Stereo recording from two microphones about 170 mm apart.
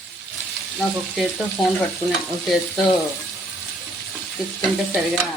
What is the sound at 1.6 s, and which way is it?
Stir, 30° left (ahead or behind).